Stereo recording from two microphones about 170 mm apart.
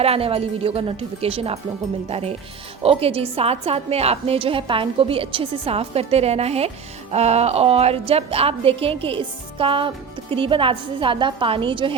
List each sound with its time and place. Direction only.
0.0 s a woman's voice: 35° right (ahead or behind)